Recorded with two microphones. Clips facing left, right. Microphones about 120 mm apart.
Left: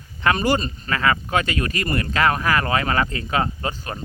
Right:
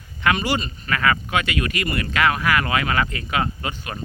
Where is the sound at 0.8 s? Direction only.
25° left (ahead or behind).